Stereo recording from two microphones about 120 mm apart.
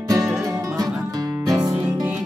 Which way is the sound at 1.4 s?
35° right (ahead or behind).